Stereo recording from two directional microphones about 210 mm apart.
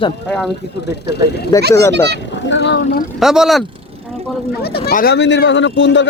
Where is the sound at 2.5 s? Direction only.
60° left (ahead or behind).